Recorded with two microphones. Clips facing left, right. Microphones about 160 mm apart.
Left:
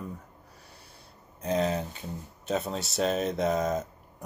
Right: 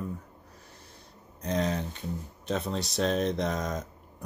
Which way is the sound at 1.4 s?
5° left (ahead or behind).